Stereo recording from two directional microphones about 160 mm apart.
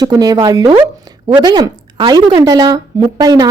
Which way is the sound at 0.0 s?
25° right (ahead or behind).